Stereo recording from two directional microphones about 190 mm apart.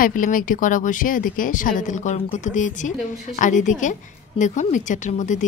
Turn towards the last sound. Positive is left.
turn(degrees=40)  # may be behind; listen again after turning